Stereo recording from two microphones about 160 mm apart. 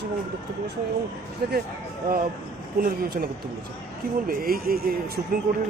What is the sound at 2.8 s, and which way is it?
Speech, 70° right (ahead or behind).